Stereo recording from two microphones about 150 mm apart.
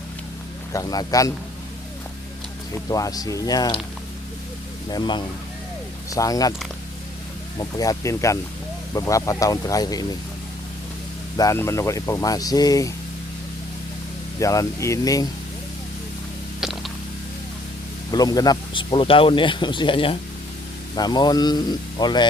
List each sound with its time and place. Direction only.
0.7 s speech: 25° left (ahead or behind)
2.9 s speech: 25° left (ahead or behind)
4.9 s speech: 30° left (ahead or behind)
7.6 s speech: 25° left (ahead or behind)
11.3 s speech: 20° left (ahead or behind)
14.3 s speech: 20° left (ahead or behind)
16.6 s a sound: centre (ahead or behind)
18.1 s speech: 25° left (ahead or behind)